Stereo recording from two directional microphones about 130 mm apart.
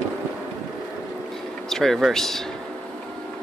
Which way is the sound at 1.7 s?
Centre (ahead or behind).